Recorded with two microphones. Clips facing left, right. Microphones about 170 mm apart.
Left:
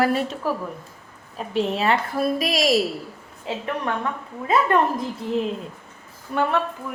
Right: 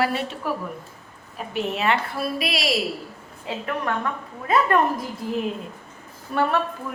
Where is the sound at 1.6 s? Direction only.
35° left (ahead or behind).